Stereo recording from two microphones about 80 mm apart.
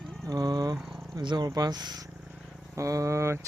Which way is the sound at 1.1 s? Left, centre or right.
Right.